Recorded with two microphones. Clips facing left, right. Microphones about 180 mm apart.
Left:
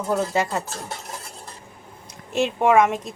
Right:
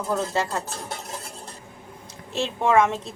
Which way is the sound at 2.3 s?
15° left (ahead or behind).